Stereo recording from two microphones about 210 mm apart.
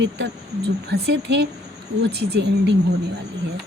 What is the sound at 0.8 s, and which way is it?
Speech, 55° right (ahead or behind).